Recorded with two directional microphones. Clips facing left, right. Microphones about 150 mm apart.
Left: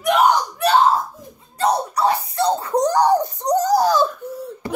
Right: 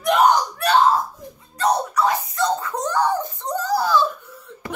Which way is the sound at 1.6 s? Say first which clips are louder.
Left 1 dB; 30° left (ahead or behind).